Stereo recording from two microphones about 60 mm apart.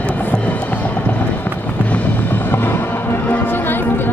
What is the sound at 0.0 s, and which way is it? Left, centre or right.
Music, left.